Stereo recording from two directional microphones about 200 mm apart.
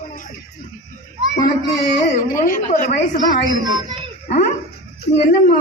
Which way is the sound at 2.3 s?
40° left (ahead or behind).